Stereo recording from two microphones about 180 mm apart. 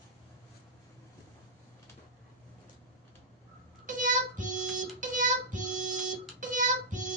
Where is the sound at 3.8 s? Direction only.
45° right (ahead or behind).